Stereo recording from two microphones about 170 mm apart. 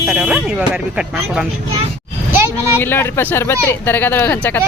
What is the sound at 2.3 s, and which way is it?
Vehicle, 15° right (ahead or behind).